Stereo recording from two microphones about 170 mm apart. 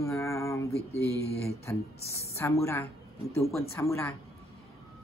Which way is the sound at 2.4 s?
15° left (ahead or behind).